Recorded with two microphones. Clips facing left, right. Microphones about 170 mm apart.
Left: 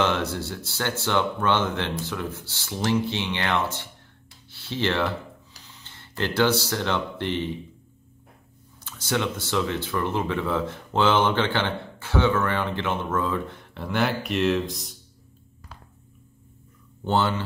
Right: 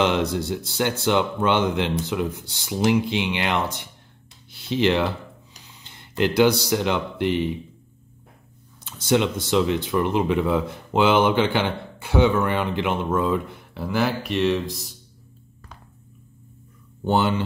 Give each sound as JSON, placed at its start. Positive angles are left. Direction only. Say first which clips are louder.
{"t": 0.0, "sound": "speech", "louder": "right 3 dB", "side_deg": -20}
{"t": 4.5, "sound": "a sound", "louder": "right 6 dB", "side_deg": -15}
{"t": 8.8, "sound": "speech", "louder": "right 6 dB", "side_deg": -20}
{"t": 17.0, "sound": "speech", "louder": "right 2 dB", "side_deg": -15}